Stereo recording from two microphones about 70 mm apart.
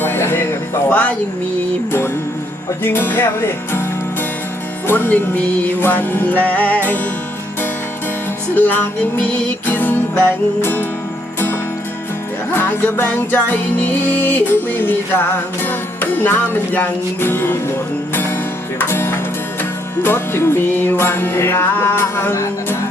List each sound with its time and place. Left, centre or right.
0.0 s music: left
0.9 s speech: left
2.8 s music: left
4.9 s music: left
8.5 s music: left
12.5 s music: left